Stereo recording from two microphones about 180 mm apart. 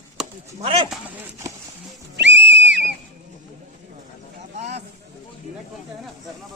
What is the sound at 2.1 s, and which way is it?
Music, 80° right.